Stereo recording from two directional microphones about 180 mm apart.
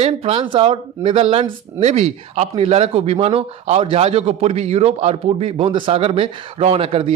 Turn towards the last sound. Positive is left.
turn(degrees=-30)  # may be behind; listen again after turning